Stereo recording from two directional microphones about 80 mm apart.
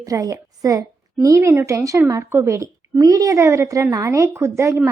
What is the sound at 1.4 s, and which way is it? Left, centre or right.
A woman's voice, right.